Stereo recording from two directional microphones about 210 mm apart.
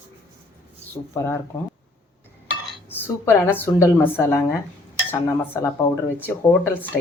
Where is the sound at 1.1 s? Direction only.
10° left (ahead or behind).